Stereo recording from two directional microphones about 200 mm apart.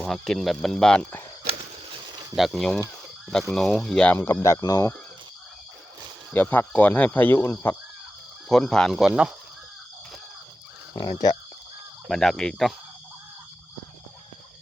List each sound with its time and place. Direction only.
0.0 s speech: centre (ahead or behind)
1.5 s a sound: 25° right (ahead or behind)
2.3 s speech: centre (ahead or behind)
6.3 s speech: 10° left (ahead or behind)
10.9 s speech: 20° left (ahead or behind)
12.0 s speech: centre (ahead or behind)